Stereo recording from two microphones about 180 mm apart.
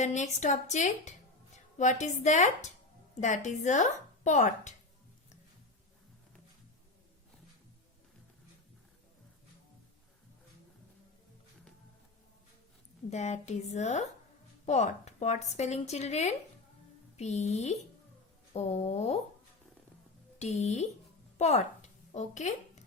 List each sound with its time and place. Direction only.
0.0 s a woman's voice: 40° left (ahead or behind)
13.1 s speech: 40° left (ahead or behind)
20.4 s speech: 40° left (ahead or behind)
21.3 s a sound: 40° left (ahead or behind)